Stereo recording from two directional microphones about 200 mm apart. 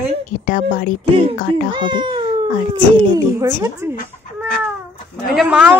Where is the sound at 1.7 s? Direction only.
25° right (ahead or behind).